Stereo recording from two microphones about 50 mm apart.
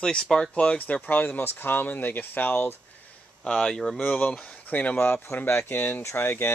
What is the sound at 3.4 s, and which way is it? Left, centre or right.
Speech, left.